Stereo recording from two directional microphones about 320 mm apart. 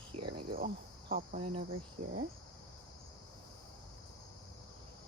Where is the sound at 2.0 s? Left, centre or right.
Right.